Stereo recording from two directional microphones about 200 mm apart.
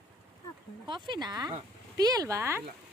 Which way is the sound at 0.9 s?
20° right (ahead or behind).